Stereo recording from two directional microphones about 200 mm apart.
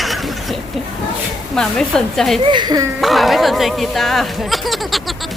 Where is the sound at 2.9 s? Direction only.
Centre (ahead or behind).